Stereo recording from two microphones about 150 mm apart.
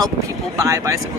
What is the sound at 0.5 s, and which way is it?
Speech, 20° right (ahead or behind).